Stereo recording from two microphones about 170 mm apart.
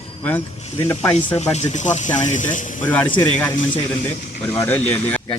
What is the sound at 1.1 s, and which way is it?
Speech, 40° left (ahead or behind).